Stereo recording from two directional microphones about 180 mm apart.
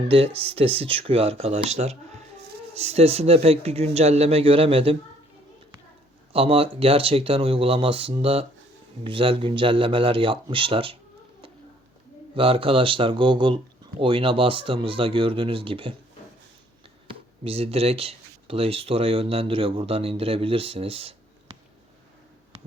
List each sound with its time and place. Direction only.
0.1 s speech: 30° right (ahead or behind)
6.3 s speech: 30° right (ahead or behind)
12.3 s speech: 30° right (ahead or behind)
17.1 s speech: 35° right (ahead or behind)